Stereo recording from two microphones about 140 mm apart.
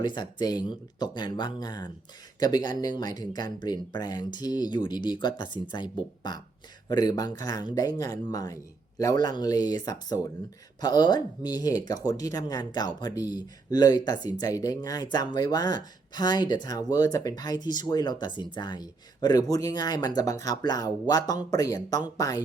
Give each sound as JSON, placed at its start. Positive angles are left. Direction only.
{"t": 0.0, "sound": "speech", "side_deg": 30}